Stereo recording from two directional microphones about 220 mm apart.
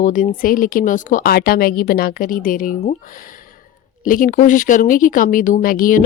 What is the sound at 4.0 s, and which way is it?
Speech, 40° left (ahead or behind).